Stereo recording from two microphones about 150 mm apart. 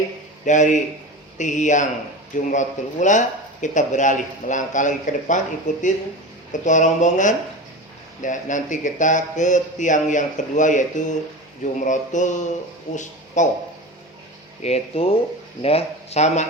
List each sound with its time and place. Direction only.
0.4 s speech: 55° left (ahead or behind)
14.6 s speech: 45° left (ahead or behind)